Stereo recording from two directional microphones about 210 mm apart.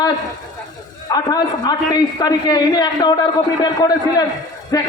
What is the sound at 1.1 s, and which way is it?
A man's voice, 20° left (ahead or behind).